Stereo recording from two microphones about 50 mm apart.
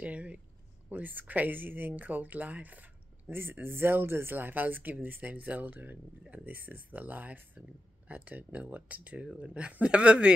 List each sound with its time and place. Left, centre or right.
0.0 s speech: right
3.6 s speech: right